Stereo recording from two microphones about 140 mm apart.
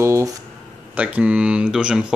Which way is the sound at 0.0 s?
20° right (ahead or behind).